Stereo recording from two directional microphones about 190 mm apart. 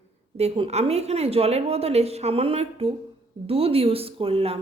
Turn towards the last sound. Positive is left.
turn(degrees=-30)  # may be behind; listen again after turning